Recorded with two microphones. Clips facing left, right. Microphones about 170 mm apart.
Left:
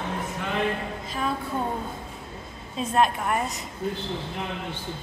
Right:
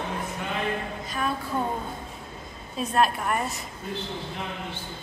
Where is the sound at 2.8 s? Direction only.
20° left (ahead or behind).